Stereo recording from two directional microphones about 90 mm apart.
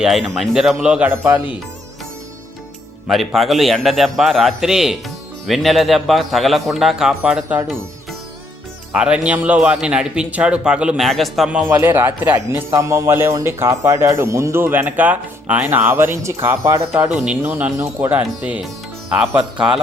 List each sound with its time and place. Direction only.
0.0 s a man's voice: centre (ahead or behind)
1.1 s speech: 35° right (ahead or behind)
3.1 s a man's voice: centre (ahead or behind)
8.9 s a man's voice: 10° right (ahead or behind)
11.4 s a man's voice: 10° right (ahead or behind)
11.8 s speech: 25° right (ahead or behind)
12.8 s speech: 35° right (ahead or behind); by 15.8 s 15° right (ahead or behind)
15.9 s a man's voice: 25° right (ahead or behind); by 19.8 s 10° right (ahead or behind)